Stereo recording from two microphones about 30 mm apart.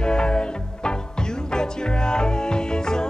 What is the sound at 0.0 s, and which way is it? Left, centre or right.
Music, left.